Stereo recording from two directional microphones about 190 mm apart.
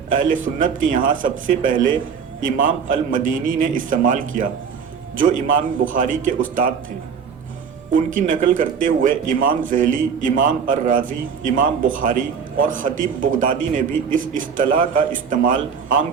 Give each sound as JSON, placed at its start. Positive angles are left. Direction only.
{"t": 0.1, "sound": "speech", "side_deg": -45}
{"t": 7.9, "sound": "speech", "side_deg": -45}